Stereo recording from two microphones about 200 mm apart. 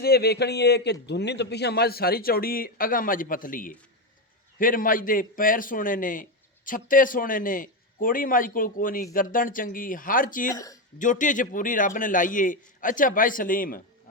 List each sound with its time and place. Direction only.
0.0 s a man's voice: 50° left (ahead or behind)
10.5 s speech: 15° left (ahead or behind)
10.9 s a man's voice: 40° left (ahead or behind)